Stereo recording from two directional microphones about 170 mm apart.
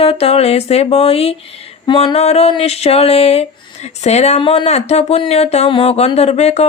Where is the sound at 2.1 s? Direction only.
40° left (ahead or behind).